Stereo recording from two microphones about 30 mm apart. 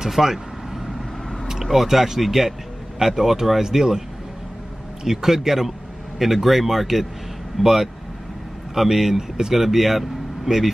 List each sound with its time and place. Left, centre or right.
0.1 s vehicle: centre
1.6 s speech: centre
5.0 s speech: centre